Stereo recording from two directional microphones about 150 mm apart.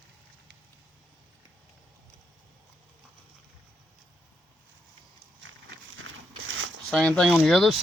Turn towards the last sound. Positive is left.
turn(degrees=0)  # may be behind; listen again after turning